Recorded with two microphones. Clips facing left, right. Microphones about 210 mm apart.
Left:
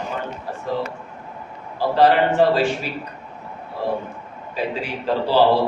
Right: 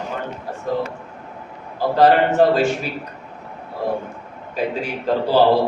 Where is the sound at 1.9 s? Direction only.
45° right (ahead or behind).